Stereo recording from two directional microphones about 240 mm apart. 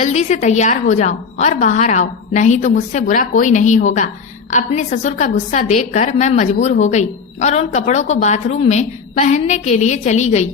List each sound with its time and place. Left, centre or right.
0.0 s a woman's voice: left